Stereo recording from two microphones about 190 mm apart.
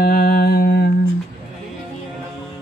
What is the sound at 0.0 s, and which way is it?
Mantra, 50° left (ahead or behind).